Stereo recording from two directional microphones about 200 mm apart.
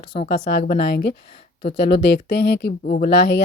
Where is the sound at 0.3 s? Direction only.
55° left (ahead or behind).